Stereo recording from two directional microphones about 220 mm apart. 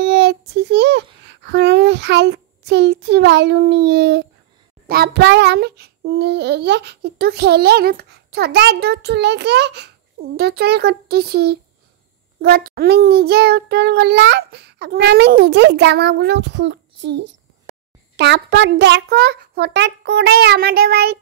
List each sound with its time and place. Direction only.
0.0 s child singing: 50° right (ahead or behind)